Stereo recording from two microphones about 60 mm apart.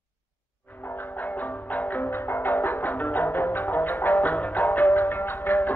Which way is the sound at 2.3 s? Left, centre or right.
Left.